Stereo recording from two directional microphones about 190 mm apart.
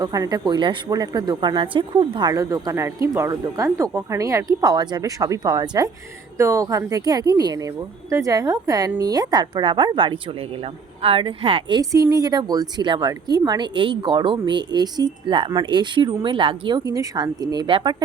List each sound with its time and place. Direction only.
0.0 s a woman's voice: 20° right (ahead or behind)